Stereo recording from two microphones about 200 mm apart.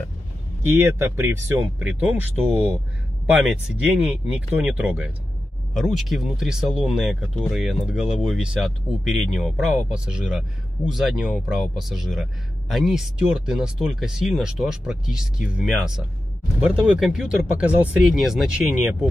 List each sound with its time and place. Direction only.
0.7 s speech: 10° right (ahead or behind)